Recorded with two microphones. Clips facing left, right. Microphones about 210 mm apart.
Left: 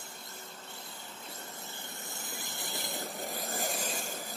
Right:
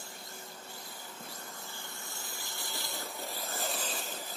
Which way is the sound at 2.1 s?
20° left (ahead or behind).